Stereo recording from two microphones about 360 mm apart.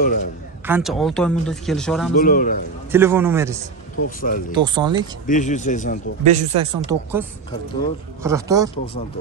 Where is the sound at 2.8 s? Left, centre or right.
Centre.